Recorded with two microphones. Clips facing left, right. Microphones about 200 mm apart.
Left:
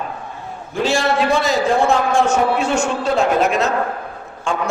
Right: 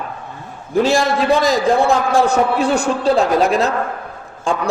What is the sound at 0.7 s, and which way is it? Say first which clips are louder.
A man's voice: right 3 dB; 35° right (ahead or behind).